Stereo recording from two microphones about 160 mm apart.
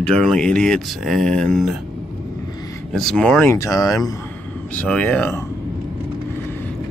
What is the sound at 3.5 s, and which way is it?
Speech, 20° left (ahead or behind).